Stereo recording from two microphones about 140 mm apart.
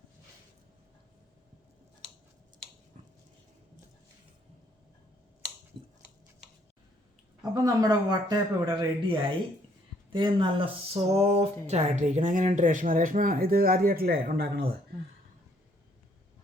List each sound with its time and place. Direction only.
7.5 s speech: 25° right (ahead or behind); by 14.7 s 90° right